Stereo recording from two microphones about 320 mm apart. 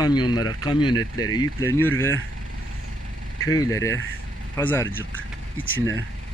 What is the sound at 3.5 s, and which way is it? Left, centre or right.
Speech, centre.